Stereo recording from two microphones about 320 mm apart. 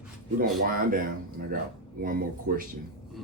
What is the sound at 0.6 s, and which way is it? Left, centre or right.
Speech, right.